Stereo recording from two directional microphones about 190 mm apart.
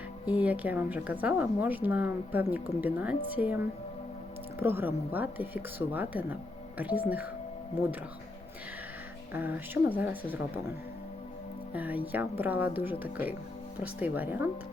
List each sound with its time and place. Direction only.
0.3 s a woman's voice: 10° right (ahead or behind)
4.6 s a woman's voice: 10° right (ahead or behind)
9.3 s a woman's voice: 10° right (ahead or behind)
11.7 s a woman's voice: 10° right (ahead or behind)